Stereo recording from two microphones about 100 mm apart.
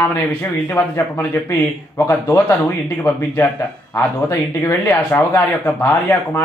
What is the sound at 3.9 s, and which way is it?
A man's voice, 25° left (ahead or behind).